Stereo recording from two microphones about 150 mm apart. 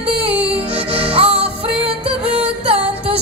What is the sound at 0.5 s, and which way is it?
Music, 40° right (ahead or behind).